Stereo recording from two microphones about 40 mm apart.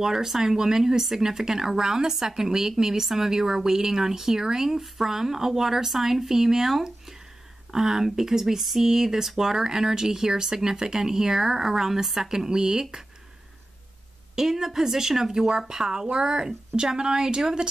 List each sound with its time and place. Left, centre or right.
0.0 s speech: centre
14.3 s speech: centre